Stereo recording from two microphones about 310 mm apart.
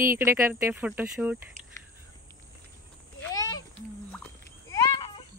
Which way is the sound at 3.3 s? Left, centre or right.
Centre.